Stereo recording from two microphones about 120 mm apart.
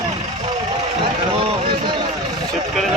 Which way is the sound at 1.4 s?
45° right (ahead or behind).